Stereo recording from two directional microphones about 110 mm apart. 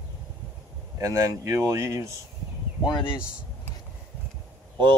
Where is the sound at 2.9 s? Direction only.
45° left (ahead or behind).